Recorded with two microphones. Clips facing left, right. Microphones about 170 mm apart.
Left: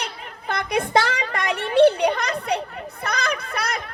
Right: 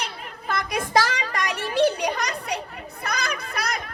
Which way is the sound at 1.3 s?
60° left (ahead or behind).